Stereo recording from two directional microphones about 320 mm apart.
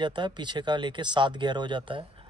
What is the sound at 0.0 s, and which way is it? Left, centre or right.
Speech, centre.